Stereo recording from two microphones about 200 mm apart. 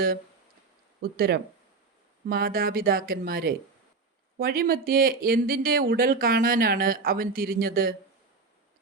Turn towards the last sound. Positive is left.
turn(degrees=-45)  # may be behind; listen again after turning